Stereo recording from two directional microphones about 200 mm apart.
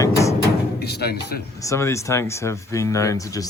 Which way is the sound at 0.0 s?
15° left (ahead or behind).